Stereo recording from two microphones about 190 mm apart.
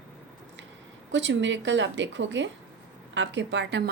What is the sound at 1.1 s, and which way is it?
A woman's voice, 70° right (ahead or behind).